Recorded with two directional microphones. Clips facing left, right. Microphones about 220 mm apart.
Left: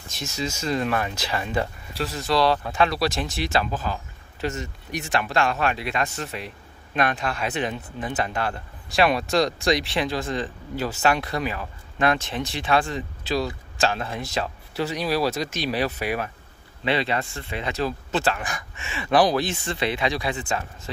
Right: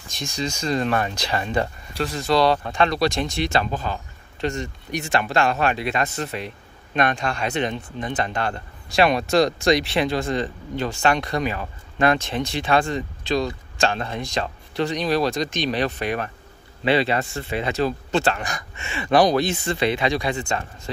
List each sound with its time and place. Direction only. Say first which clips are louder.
0.1 s speech: right 2 dB; 5° left (ahead or behind)
16.8 s speech: right 4 dB; 35° right (ahead or behind)
17.7 s speech: right 3 dB; centre (ahead or behind)